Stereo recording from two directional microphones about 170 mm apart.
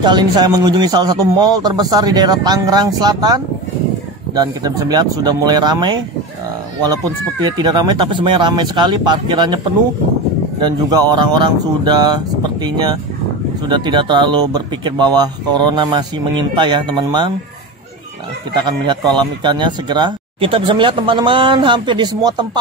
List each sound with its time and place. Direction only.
0.0 s a man's voice: 25° right (ahead or behind)
4.4 s a man's voice: 25° right (ahead or behind)
7.4 s a man's voice: 25° right (ahead or behind)
10.6 s a man's voice: 25° right (ahead or behind)
18.6 s a man's voice: 25° right (ahead or behind)